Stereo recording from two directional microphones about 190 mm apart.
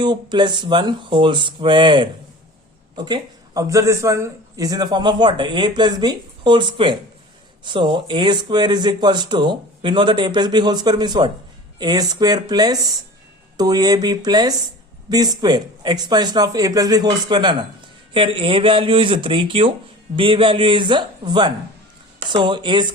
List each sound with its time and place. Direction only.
0.0 s a man's voice: 25° right (ahead or behind)